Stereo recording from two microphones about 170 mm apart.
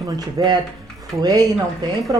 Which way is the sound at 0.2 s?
25° right (ahead or behind).